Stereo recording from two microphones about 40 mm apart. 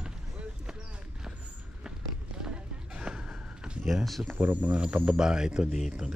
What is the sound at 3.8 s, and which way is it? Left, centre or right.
Speech, centre.